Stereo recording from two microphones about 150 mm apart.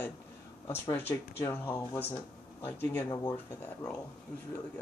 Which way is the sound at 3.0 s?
25° left (ahead or behind).